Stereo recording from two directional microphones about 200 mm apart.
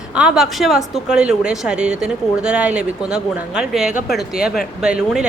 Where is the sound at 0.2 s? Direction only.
5° right (ahead or behind).